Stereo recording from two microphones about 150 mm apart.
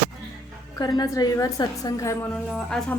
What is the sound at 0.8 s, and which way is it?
A woman's voice, 25° left (ahead or behind).